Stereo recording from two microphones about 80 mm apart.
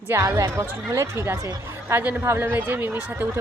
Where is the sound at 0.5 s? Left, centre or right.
Right.